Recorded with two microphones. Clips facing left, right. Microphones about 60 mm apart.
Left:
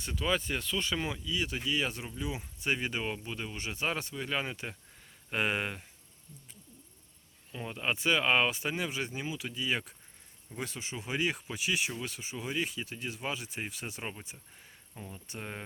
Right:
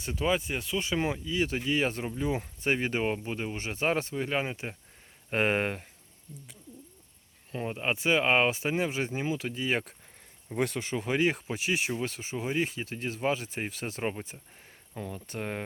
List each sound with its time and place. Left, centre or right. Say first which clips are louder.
0.0 s speech: right 3 dB; right
0.9 s speech: right 5 dB; right
5.3 s speech: right 5 dB; right
7.5 s speech: right 3 dB; right
10.5 s speech: right 9 dB; right
14.9 s speech: right 8 dB; right
15.3 s speech: right 6 dB; right